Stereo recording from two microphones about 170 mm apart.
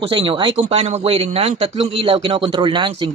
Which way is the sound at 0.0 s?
30° right (ahead or behind).